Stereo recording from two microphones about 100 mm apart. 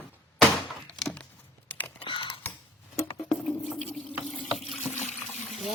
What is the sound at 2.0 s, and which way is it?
Computer keyboard, 55° left (ahead or behind).